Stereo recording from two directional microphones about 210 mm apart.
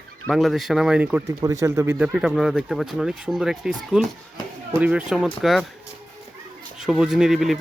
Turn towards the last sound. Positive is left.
turn(degrees=0)  # may be behind; listen again after turning